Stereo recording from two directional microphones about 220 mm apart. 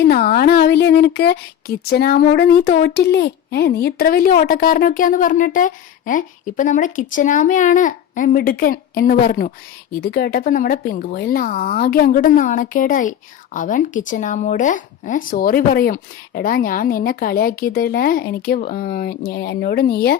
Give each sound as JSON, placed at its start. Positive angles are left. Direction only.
{"t": 0.0, "sound": "speech", "side_deg": 45}